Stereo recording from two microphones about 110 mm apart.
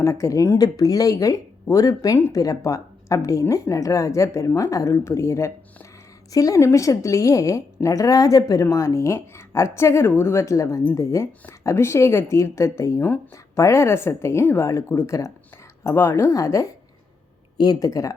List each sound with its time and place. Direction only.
0.0 s a woman's voice: 25° left (ahead or behind)